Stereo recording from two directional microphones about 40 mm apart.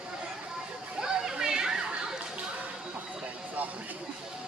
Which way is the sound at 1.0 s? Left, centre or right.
Centre.